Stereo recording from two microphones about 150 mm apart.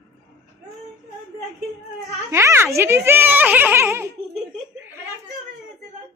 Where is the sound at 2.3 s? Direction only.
15° right (ahead or behind).